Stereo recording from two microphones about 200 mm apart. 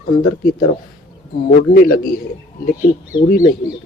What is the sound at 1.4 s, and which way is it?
Speech, 45° left (ahead or behind).